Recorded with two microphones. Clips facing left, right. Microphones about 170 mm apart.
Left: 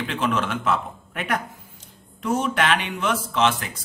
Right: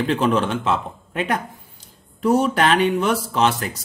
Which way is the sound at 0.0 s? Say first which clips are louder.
Right 6 dB; 35° right (ahead or behind).